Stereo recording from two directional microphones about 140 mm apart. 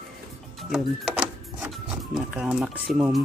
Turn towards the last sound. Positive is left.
turn(degrees=-10)  # may be behind; listen again after turning